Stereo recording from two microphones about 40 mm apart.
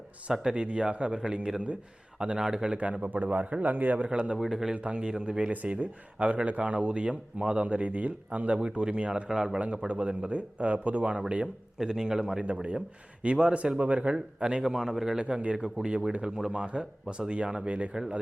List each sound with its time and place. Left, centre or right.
0.4 s a man's voice: right
2.7 s speech: right
3.6 s a man's voice: right
4.1 s a man's voice: right
4.4 s a man's voice: centre
4.7 s speech: right
4.9 s a man's voice: right
5.5 s speech: right
8.6 s a man's voice: right
9.6 s speech: right
11.8 s a man's voice: centre
14.6 s a man's voice: centre; by 17.9 s right